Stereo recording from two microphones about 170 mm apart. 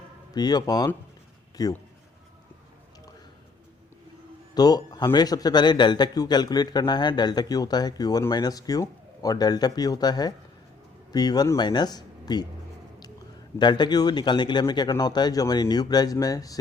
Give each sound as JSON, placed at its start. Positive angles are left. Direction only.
{"t": 0.3, "sound": "a man's voice", "side_deg": 25}
{"t": 4.5, "sound": "a man's voice", "side_deg": 25}
{"t": 13.6, "sound": "a man's voice", "side_deg": 25}